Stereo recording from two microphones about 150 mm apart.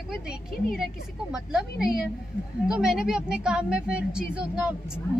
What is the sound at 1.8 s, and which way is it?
Speech, 90° left.